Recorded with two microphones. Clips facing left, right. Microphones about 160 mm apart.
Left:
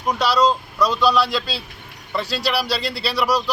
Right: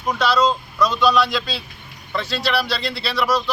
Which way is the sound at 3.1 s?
10° left (ahead or behind).